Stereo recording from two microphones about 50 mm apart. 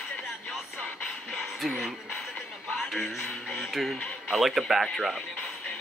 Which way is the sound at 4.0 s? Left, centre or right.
Centre.